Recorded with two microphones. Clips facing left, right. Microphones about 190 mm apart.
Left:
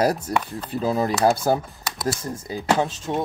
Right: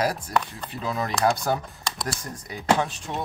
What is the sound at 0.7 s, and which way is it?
Speech, 35° left (ahead or behind).